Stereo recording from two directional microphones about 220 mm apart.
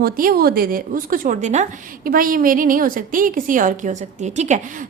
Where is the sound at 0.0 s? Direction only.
40° right (ahead or behind).